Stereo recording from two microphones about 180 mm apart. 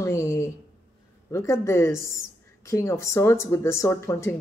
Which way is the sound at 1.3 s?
15° left (ahead or behind).